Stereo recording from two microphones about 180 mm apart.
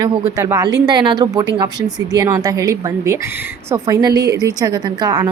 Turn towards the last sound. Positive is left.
turn(degrees=-20)  # may be behind; listen again after turning